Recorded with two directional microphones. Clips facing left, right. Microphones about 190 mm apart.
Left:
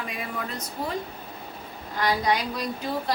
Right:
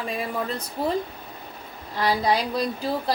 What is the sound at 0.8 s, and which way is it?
Speech, 30° right (ahead or behind).